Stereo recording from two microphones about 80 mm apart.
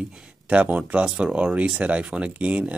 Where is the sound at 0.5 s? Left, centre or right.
Centre.